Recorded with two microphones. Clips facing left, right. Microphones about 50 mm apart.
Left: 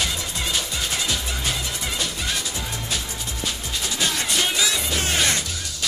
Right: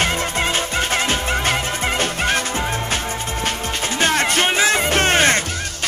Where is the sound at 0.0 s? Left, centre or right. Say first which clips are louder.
Right 8 dB; right.